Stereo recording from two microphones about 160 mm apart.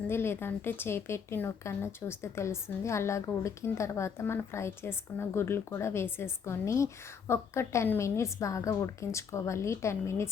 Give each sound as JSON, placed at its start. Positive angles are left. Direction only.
{"t": 0.1, "sound": "speech", "side_deg": 15}